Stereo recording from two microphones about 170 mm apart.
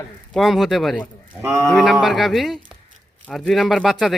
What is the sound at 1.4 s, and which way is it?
Speech, 15° right (ahead or behind).